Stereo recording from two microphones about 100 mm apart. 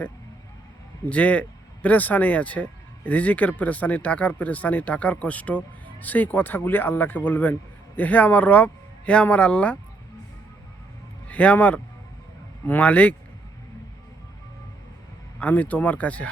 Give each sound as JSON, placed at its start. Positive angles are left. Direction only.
{"t": 1.1, "sound": "speech", "side_deg": 15}
{"t": 11.3, "sound": "speech", "side_deg": 15}
{"t": 15.4, "sound": "speech", "side_deg": 15}